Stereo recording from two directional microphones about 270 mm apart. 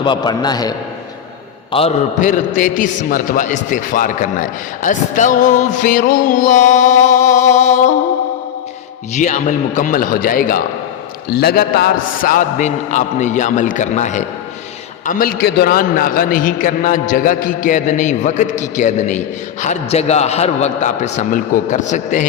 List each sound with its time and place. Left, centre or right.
0.0 s a man's voice: centre
1.7 s a man's voice: left
9.1 s a man's voice: left